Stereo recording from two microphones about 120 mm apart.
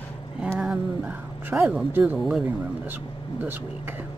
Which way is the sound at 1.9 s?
15° right (ahead or behind).